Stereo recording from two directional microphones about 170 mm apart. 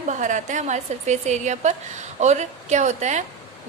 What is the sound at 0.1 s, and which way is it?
A woman's voice, 45° right (ahead or behind).